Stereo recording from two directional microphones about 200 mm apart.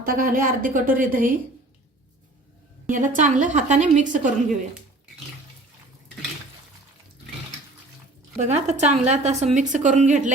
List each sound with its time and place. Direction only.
0.0 s a woman's voice: 45° right (ahead or behind)
2.9 s a woman's voice: 40° right (ahead or behind)
8.4 s a woman's voice: 35° right (ahead or behind)